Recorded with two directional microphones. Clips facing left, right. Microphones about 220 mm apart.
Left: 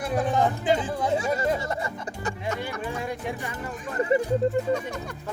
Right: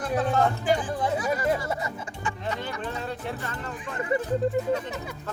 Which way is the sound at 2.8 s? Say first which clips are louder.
Left 2 dB; 10° left (ahead or behind).